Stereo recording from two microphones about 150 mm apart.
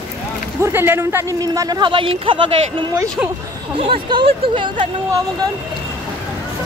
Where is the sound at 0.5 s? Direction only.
15° right (ahead or behind); by 2.9 s 35° right (ahead or behind).